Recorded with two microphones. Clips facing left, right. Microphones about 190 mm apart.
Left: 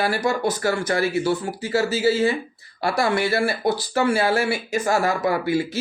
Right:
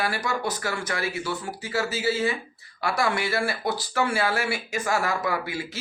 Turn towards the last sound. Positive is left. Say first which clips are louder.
# left 6 dB
turn(degrees=30)  # may be behind; listen again after turning